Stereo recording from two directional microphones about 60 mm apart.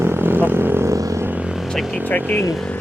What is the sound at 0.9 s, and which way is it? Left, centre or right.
Music, right.